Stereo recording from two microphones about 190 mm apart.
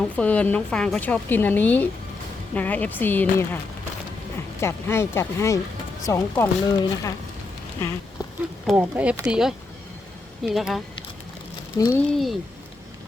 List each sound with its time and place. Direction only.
0.0 s a woman's voice: 5° left (ahead or behind)
4.6 s a woman's voice: 15° left (ahead or behind)
8.6 s speech: 5° right (ahead or behind)
11.8 s a woman's voice: 15° left (ahead or behind)
12.1 s speech: centre (ahead or behind)